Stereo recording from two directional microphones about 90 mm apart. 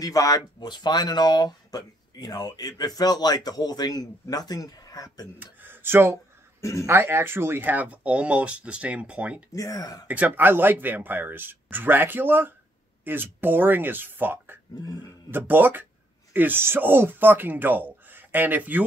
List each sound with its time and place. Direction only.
0.0 s speech: 40° left (ahead or behind)
0.7 s speech: 55° left (ahead or behind)
5.4 s speech: 20° right (ahead or behind)
6.6 s speech: 35° left (ahead or behind)
6.9 s speech: 25° right (ahead or behind)
9.5 s speech: 45° left (ahead or behind)
10.0 s speech: 20° right (ahead or behind)
14.8 s speech: 45° left (ahead or behind)
15.3 s speech: 20° right (ahead or behind)